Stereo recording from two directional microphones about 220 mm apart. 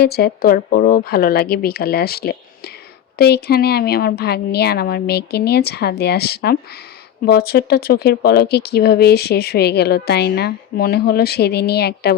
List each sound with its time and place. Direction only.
0.0 s speech: 45° left (ahead or behind)